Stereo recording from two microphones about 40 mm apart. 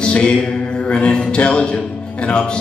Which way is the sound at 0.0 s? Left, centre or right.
Left.